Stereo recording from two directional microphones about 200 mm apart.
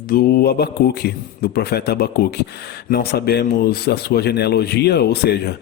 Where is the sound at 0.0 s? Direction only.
50° left (ahead or behind).